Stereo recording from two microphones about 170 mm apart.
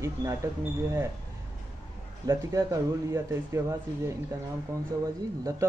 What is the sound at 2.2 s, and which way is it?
Speech, 20° right (ahead or behind).